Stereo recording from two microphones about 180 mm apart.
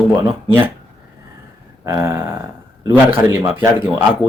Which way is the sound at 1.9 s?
15° right (ahead or behind).